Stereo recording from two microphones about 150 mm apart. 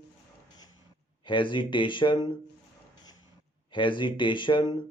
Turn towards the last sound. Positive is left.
turn(degrees=30)  # may be behind; listen again after turning